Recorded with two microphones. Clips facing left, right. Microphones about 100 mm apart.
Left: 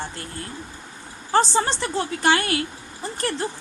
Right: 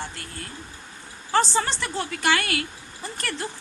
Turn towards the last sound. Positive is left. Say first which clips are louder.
# left 5 dB
turn(degrees=30)  # may be behind; listen again after turning